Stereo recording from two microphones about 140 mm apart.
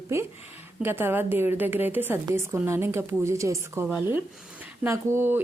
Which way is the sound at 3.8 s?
10° right (ahead or behind).